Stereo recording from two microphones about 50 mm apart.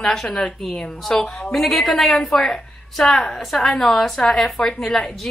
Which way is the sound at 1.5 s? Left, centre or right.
Centre.